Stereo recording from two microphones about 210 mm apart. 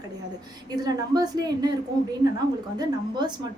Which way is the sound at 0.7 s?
20° right (ahead or behind).